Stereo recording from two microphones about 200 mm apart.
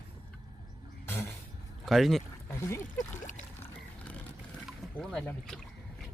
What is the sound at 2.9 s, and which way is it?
Pour, 40° left (ahead or behind).